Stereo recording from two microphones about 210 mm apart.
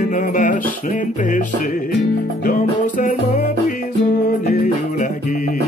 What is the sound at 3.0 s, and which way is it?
Music, 35° left (ahead or behind).